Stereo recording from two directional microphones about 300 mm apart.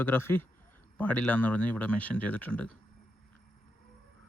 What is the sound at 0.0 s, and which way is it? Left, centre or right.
Speech, centre.